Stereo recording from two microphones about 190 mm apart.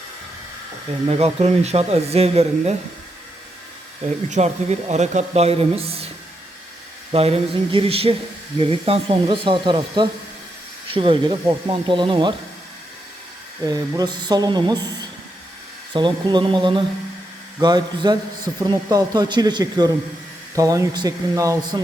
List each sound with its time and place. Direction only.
1.0 s speech: 35° right (ahead or behind)
4.3 s speech: 35° right (ahead or behind)
7.1 s a man's voice: 30° right (ahead or behind)
13.7 s a man's voice: 20° right (ahead or behind)
15.9 s a man's voice: 25° right (ahead or behind)